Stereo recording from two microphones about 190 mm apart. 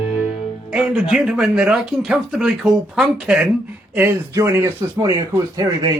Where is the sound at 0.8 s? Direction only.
Centre (ahead or behind).